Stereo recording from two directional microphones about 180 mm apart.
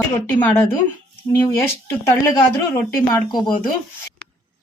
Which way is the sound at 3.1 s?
25° left (ahead or behind).